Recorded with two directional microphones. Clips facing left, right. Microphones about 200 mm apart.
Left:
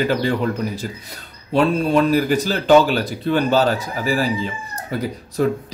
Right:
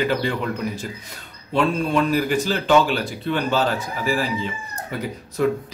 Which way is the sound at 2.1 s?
40° left (ahead or behind).